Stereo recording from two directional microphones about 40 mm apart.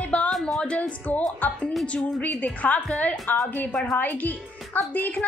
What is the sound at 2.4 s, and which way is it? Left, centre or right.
Speech, left.